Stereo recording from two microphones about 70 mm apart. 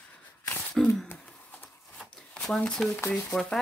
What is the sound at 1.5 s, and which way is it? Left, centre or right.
Horse, left.